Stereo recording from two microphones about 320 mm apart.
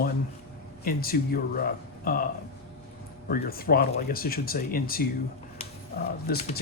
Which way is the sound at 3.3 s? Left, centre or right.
Left.